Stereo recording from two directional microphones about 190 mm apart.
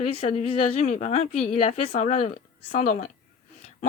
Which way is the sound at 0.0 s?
35° left (ahead or behind).